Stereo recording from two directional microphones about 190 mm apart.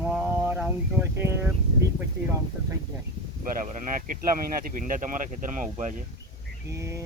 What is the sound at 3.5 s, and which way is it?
Speech, 40° right (ahead or behind).